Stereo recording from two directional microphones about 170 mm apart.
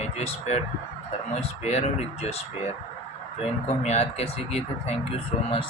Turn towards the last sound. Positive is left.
turn(degrees=35)  # may be behind; listen again after turning